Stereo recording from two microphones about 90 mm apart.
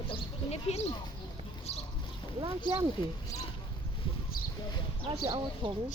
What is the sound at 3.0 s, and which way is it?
Speech, 70° left (ahead or behind).